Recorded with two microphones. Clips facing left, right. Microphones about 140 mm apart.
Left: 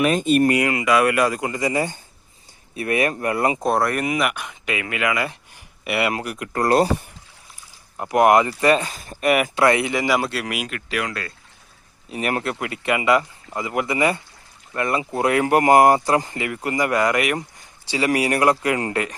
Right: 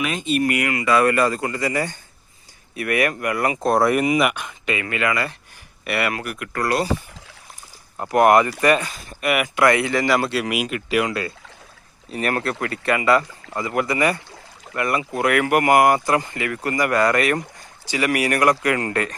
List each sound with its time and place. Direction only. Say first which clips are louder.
0.0 s speech: left 5 dB; 45° left (ahead or behind)
0.4 s speech: left 3 dB; 30° left (ahead or behind)
0.9 s speech: right 2 dB; 10° left (ahead or behind); by 3.6 s 25° left (ahead or behind)
3.6 s speech: right 3 dB; centre (ahead or behind); by 6.7 s 25° left (ahead or behind)
7.9 s speech: even; 15° left (ahead or behind); by 11.3 s 15° right (ahead or behind)
12.1 s speech: right 1 dB; 15° left (ahead or behind)
17.9 s speech: left 1 dB; 25° left (ahead or behind)